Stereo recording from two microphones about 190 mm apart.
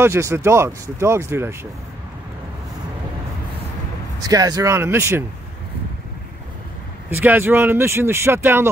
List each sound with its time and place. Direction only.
0.0 s speech: 15° right (ahead or behind)
4.2 s speech: 20° right (ahead or behind)
7.1 s speech: 10° right (ahead or behind)